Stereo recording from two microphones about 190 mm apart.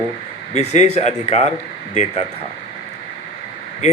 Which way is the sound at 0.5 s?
35° left (ahead or behind).